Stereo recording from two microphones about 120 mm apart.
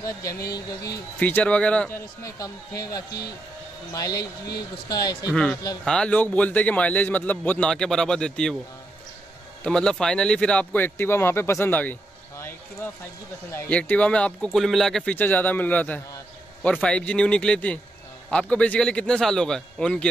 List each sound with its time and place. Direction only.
0.0 s a man's voice: 30° left (ahead or behind)
1.2 s a man's voice: 10° left (ahead or behind)
1.9 s a man's voice: 25° left (ahead or behind)
5.3 s a man's voice: 5° left (ahead or behind)
9.6 s a man's voice: 5° left (ahead or behind)
15.1 s a man's voice: 15° left (ahead or behind)